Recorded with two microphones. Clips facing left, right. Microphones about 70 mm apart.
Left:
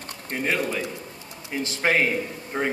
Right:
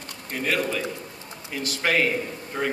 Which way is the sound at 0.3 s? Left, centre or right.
Left.